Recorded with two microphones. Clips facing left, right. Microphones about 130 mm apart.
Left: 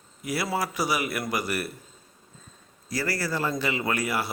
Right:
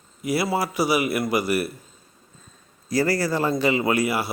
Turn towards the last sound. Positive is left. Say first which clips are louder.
# right 5 dB
turn(degrees=-10)  # may be behind; listen again after turning